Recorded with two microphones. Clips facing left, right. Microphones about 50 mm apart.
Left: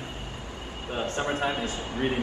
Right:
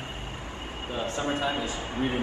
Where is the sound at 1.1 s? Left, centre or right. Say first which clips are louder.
Even; left.